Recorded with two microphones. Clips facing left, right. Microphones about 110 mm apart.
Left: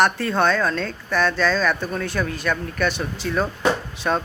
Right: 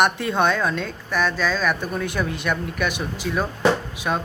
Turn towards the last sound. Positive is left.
turn(degrees=-10)  # may be behind; listen again after turning